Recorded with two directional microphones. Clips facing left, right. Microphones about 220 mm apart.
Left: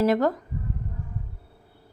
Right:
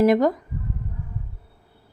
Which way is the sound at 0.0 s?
15° right (ahead or behind).